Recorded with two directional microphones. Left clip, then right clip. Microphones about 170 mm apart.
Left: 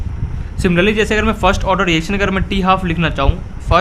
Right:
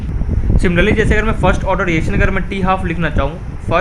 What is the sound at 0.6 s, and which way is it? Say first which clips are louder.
Speech: even; 35° left (ahead or behind).